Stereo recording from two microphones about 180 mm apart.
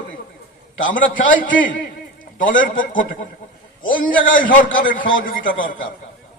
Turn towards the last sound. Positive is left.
turn(degrees=50)  # may be behind; listen again after turning